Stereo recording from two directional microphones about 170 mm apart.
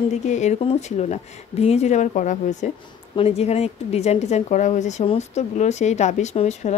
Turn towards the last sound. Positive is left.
turn(degrees=40)  # may be behind; listen again after turning